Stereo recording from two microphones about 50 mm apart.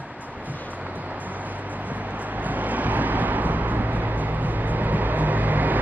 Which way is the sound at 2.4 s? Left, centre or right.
Right.